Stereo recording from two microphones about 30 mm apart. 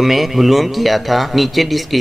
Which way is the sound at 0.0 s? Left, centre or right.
Centre.